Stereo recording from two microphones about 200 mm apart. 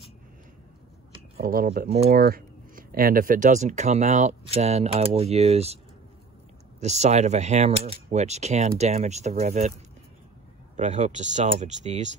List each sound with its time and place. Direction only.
1.4 s speech: 45° right (ahead or behind)
6.8 s speech: 35° right (ahead or behind)
10.8 s speech: 35° right (ahead or behind)